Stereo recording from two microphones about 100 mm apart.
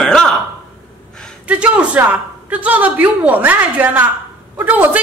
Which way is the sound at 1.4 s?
15° right (ahead or behind).